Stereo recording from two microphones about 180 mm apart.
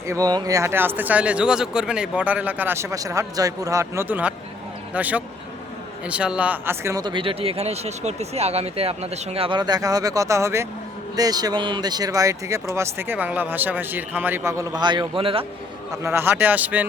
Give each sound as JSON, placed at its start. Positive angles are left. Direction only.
{"t": 0.1, "sound": "speech", "side_deg": -20}
{"t": 16.0, "sound": "speech", "side_deg": -10}